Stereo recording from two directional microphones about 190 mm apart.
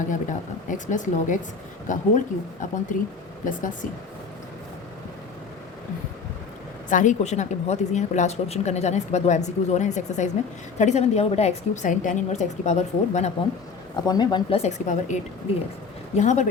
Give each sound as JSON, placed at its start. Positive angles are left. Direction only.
{"t": 0.1, "sound": "a woman's voice", "side_deg": 40}
{"t": 6.9, "sound": "a woman's voice", "side_deg": 40}
{"t": 13.9, "sound": "speech", "side_deg": 20}
{"t": 14.6, "sound": "a woman's voice", "side_deg": 40}